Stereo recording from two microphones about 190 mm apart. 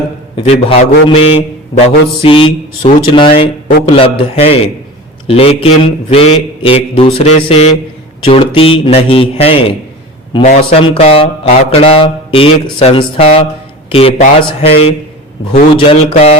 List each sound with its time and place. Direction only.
0.3 s mantra: 30° left (ahead or behind)
2.2 s speech: 30° left (ahead or behind)
10.4 s mantra: 35° left (ahead or behind)
15.7 s speech: 30° left (ahead or behind)